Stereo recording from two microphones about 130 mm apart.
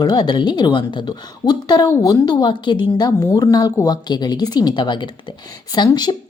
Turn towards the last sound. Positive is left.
turn(degrees=30)  # may be behind; listen again after turning